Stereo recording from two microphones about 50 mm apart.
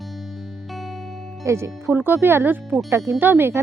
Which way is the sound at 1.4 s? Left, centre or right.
Right.